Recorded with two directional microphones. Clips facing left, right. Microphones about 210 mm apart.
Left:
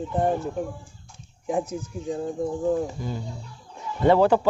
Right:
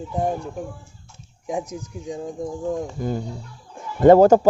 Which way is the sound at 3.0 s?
50° right (ahead or behind).